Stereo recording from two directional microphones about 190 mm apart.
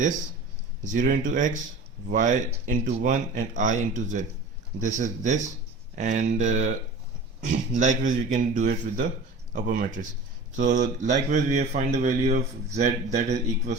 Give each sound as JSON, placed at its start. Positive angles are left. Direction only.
{"t": 0.9, "sound": "speech", "side_deg": -45}